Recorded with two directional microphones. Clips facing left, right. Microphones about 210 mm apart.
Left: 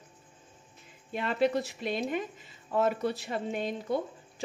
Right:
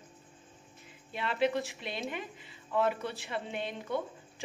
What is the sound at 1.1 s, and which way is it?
Speech, 45° left (ahead or behind).